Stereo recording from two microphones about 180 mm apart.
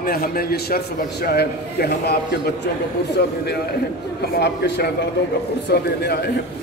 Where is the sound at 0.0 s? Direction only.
55° left (ahead or behind).